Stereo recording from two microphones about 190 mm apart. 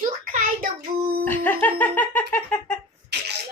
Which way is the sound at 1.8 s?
10° left (ahead or behind).